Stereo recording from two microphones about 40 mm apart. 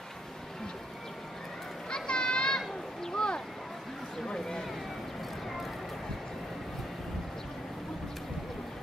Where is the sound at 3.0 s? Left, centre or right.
Centre.